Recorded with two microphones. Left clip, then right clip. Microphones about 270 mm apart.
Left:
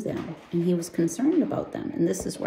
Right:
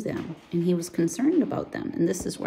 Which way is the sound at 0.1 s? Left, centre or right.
Centre.